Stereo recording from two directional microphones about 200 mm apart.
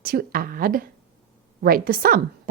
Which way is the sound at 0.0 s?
50° right (ahead or behind).